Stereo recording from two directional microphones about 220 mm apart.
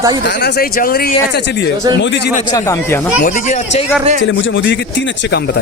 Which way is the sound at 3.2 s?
30° left (ahead or behind).